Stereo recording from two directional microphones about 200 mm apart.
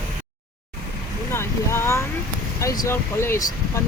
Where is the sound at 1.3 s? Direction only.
10° left (ahead or behind).